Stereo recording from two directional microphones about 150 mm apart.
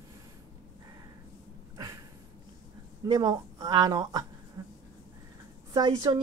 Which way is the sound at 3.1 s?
30° right (ahead or behind).